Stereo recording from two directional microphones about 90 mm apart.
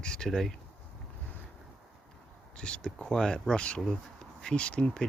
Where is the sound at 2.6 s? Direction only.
10° left (ahead or behind).